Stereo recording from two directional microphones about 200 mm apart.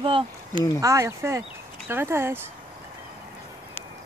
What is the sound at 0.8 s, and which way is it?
Speech, 15° right (ahead or behind).